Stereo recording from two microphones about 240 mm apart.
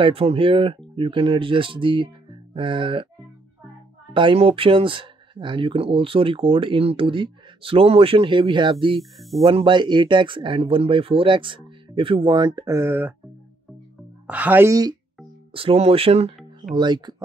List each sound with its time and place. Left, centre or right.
0.0 s speech: right
4.1 s speech: right
14.2 s speech: centre